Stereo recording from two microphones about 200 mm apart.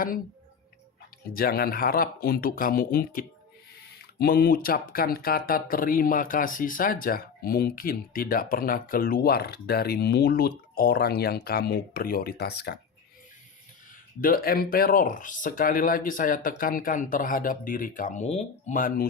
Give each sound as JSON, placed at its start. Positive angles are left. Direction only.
{"t": 1.3, "sound": "speech", "side_deg": 50}
{"t": 14.2, "sound": "speech", "side_deg": 45}